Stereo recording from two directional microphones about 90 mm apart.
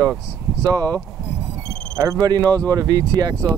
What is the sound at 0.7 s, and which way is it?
Speech, 45° right (ahead or behind).